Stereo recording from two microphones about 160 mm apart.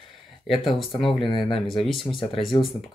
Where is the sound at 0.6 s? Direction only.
Centre (ahead or behind).